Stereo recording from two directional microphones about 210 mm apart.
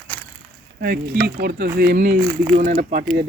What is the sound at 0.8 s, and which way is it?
Speech, 50° right (ahead or behind).